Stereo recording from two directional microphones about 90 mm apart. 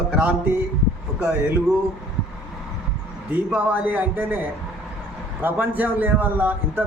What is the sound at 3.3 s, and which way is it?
A man's voice, 15° right (ahead or behind).